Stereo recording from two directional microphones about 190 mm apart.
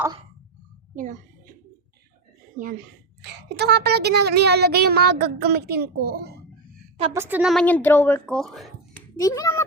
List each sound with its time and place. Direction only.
0.9 s a sound: 40° right (ahead or behind)
3.2 s speech: 60° right (ahead or behind)
7.1 s a woman's voice: 10° right (ahead or behind)
7.5 s speech: 5° left (ahead or behind)
9.2 s a child's voice: 15° left (ahead or behind)